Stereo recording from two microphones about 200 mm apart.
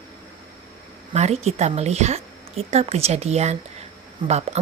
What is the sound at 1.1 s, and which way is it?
A woman's voice, 35° right (ahead or behind).